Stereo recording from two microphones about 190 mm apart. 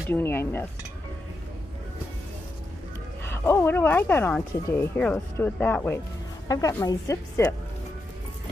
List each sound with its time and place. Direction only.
0.1 s speech: 10° left (ahead or behind)
3.3 s speech: 15° left (ahead or behind)